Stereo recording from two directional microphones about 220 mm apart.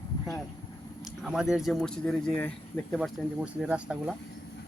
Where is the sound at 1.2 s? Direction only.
5° right (ahead or behind).